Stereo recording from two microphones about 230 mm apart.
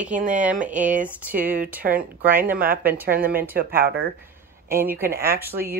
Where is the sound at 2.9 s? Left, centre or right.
Right.